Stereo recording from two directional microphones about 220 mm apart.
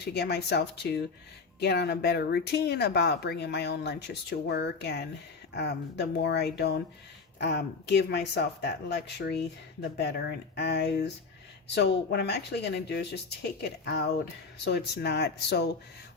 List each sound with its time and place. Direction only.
0.0 s speech: 50° left (ahead or behind)
14.6 s speech: 50° left (ahead or behind)